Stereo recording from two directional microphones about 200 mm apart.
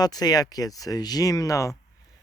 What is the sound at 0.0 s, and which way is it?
Speech, 20° left (ahead or behind).